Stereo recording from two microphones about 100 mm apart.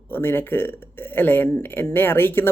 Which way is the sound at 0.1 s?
20° left (ahead or behind).